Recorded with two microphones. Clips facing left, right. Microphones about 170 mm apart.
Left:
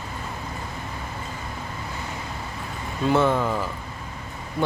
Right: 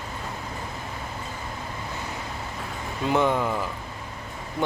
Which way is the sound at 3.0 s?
15° right (ahead or behind).